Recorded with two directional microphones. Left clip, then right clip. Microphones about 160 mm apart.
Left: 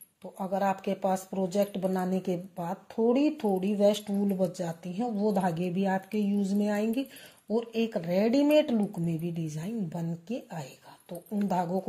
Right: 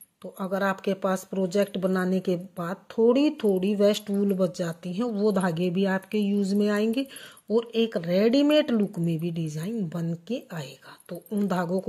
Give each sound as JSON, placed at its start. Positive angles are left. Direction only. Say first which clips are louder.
{"t": 0.2, "sound": "speech", "louder": "right 2 dB", "side_deg": -40}